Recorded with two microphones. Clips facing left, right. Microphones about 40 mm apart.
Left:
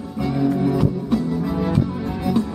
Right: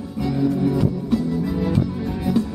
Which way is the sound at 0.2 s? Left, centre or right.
Centre.